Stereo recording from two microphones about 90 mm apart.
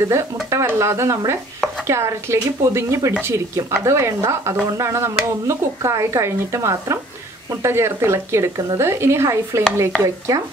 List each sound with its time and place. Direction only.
0.1 s speech: 35° right (ahead or behind)